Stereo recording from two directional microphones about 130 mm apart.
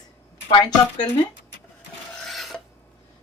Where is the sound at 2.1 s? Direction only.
Centre (ahead or behind).